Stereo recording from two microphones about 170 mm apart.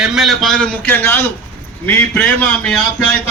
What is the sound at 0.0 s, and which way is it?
A man's voice, 5° right (ahead or behind).